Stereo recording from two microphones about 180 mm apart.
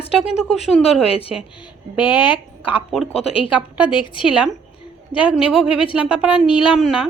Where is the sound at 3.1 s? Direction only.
35° left (ahead or behind).